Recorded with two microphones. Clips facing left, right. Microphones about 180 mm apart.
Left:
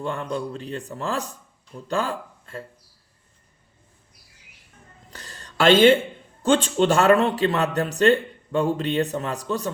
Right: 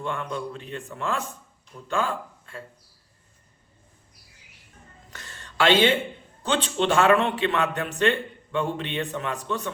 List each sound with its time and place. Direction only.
0.0 s a man's voice: 40° left (ahead or behind)
5.1 s a sound: 35° left (ahead or behind)
6.4 s a man's voice: 45° left (ahead or behind)